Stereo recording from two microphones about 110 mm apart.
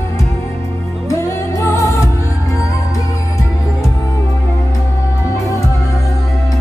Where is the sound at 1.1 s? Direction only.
25° left (ahead or behind).